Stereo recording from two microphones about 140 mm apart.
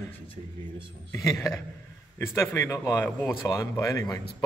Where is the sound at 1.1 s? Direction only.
20° left (ahead or behind).